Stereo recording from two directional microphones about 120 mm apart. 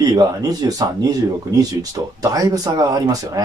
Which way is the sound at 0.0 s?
30° right (ahead or behind).